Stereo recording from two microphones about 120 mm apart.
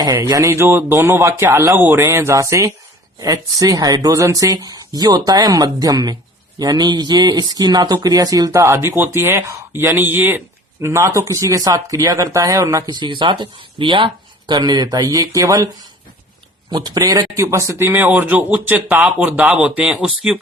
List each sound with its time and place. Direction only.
0.0 s speech: 35° right (ahead or behind); by 20.4 s 5° right (ahead or behind)